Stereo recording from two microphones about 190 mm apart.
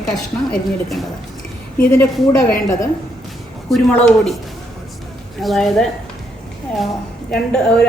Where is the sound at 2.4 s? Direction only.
15° left (ahead or behind).